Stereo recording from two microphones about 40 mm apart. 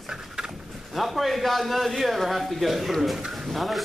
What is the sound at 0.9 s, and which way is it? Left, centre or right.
A man's voice, centre.